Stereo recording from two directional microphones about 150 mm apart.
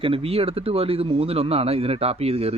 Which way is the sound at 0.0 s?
40° right (ahead or behind).